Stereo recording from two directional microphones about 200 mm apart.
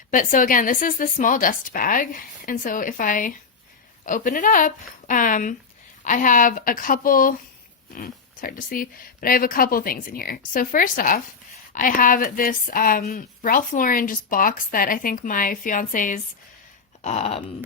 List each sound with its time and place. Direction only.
0.1 s a woman's voice: 40° left (ahead or behind)